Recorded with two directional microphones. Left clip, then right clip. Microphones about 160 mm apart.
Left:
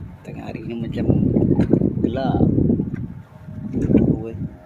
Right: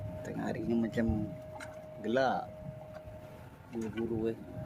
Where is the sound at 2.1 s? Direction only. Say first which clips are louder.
Left 6 dB; 20° left (ahead or behind).